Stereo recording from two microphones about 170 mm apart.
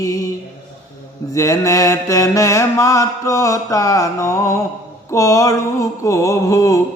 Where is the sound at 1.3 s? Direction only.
20° left (ahead or behind).